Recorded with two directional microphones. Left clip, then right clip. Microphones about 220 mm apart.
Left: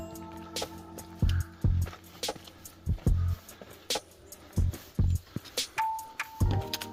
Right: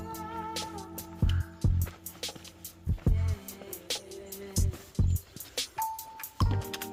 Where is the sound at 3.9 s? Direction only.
Centre (ahead or behind).